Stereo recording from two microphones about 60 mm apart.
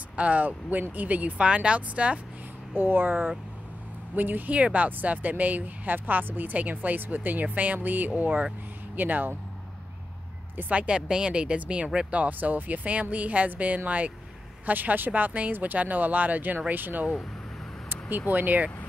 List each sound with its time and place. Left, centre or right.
0.1 s speech: right
2.7 s speech: right
10.7 s speech: right
18.3 s speech: right